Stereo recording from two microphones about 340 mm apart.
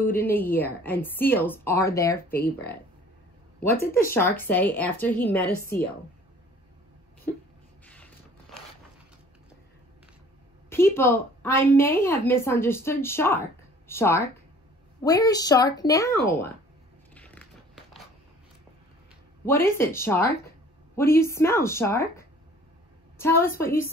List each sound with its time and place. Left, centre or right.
0.0 s a woman's voice: centre
2.3 s speech: left
4.1 s a woman's voice: centre
7.8 s a sound: centre
10.7 s a woman's voice: centre
17.1 s biting: centre
19.4 s a woman's voice: centre